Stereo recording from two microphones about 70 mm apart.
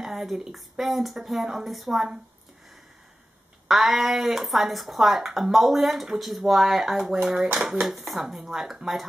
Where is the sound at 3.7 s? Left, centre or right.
Centre.